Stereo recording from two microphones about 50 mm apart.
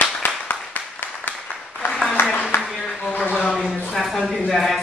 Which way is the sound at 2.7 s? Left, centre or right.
Centre.